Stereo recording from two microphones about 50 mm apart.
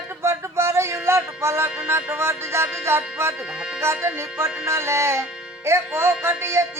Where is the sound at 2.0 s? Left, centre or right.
Right.